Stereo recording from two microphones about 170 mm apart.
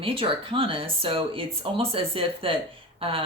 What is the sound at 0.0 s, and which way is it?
Speech, 30° right (ahead or behind).